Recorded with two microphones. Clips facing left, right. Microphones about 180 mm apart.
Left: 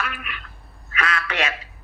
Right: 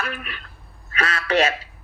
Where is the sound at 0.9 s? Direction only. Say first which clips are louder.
Right 4 dB; 40° right (ahead or behind).